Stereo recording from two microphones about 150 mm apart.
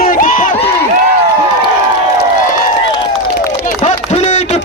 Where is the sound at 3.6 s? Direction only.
50° left (ahead or behind).